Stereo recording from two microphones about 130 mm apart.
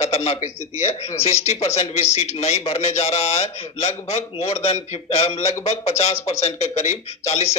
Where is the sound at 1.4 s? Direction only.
55° left (ahead or behind).